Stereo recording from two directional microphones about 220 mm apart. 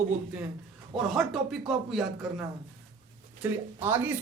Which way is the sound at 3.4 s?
10° right (ahead or behind).